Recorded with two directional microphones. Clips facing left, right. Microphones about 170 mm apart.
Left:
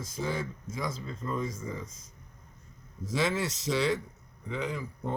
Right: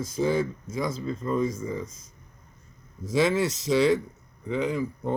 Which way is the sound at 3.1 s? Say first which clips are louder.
Right 7 dB; 15° right (ahead or behind).